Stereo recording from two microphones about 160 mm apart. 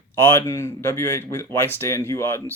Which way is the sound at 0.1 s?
15° left (ahead or behind).